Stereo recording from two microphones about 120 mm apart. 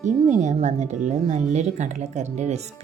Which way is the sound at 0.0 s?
85° right.